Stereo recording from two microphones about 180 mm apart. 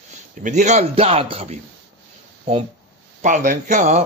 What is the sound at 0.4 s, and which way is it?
A man's voice, 45° right (ahead or behind).